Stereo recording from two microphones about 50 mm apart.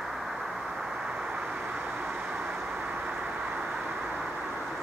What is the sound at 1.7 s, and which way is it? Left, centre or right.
Vehicle, right.